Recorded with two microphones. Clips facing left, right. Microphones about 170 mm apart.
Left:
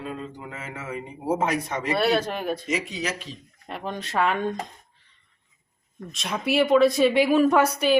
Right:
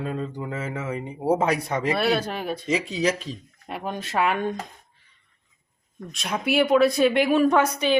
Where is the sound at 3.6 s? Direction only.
5° right (ahead or behind).